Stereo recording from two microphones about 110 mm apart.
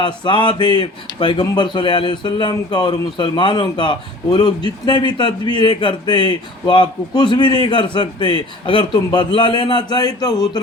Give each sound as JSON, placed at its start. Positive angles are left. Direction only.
{"t": 0.0, "sound": "speech", "side_deg": 45}